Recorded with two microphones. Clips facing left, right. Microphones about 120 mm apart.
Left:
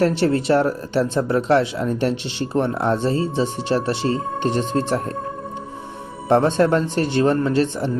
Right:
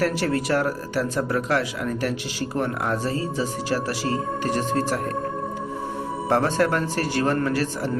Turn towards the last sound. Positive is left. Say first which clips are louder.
# left 4 dB
turn(degrees=25)  # may be behind; listen again after turning